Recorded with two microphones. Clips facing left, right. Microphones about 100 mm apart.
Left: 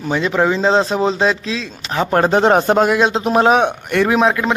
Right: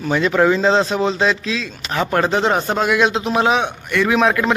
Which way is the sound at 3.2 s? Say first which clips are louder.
Left 4 dB; 45° left (ahead or behind).